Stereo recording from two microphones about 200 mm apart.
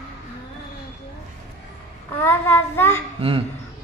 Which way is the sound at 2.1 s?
10° left (ahead or behind).